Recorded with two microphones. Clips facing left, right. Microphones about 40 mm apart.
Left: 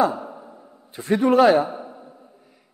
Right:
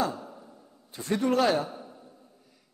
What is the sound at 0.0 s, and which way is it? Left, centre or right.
Sigh, left.